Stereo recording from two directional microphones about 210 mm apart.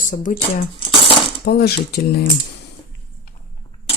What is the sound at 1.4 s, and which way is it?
Speech, 50° left (ahead or behind).